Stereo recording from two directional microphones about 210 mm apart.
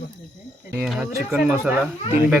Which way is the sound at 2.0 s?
35° left (ahead or behind).